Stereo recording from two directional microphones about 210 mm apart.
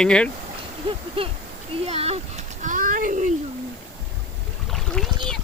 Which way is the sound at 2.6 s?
40° right (ahead or behind).